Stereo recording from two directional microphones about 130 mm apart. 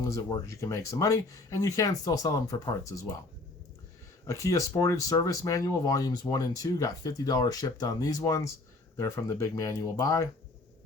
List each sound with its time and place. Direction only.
0.0 s speech: 25° left (ahead or behind)
4.3 s speech: 25° left (ahead or behind)